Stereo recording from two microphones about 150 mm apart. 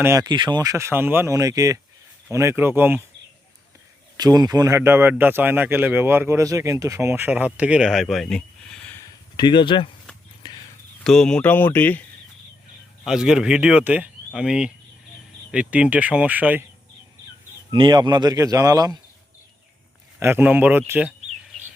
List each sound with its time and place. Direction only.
0.0 s speech: 20° right (ahead or behind)
0.3 s a man's voice: 30° right (ahead or behind); by 3.0 s 15° right (ahead or behind)
4.2 s a man's voice: 25° right (ahead or behind); by 9.0 s 5° left (ahead or behind)
9.0 s a sound: 30° left (ahead or behind)
11.0 s speech: 5° left (ahead or behind)
13.1 s a man's voice: 5° right (ahead or behind)
17.7 s speech: 30° right (ahead or behind)
20.1 s a man's voice: 15° right (ahead or behind)